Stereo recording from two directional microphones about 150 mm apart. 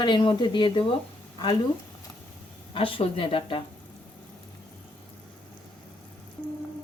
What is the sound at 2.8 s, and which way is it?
Speech, 40° left (ahead or behind).